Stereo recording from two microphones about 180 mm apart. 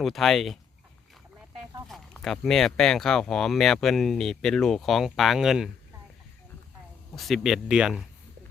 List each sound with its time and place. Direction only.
0.0 s speech: centre (ahead or behind)
1.9 s speech: centre (ahead or behind)
7.2 s speech: centre (ahead or behind)